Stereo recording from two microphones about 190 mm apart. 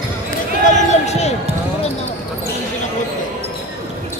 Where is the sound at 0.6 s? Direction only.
35° left (ahead or behind).